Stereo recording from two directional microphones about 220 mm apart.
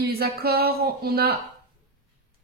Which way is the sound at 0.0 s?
45° right (ahead or behind).